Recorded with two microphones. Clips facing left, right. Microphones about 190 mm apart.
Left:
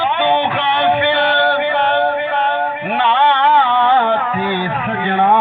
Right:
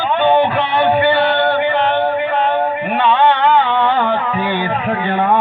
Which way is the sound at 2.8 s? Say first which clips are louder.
Right 1 dB; 65° left (ahead or behind).